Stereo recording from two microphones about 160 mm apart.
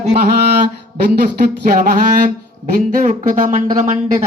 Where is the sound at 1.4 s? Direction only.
60° right (ahead or behind).